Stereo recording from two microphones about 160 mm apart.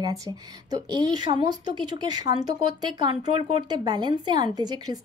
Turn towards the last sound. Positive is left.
turn(degrees=-25)  # may be behind; listen again after turning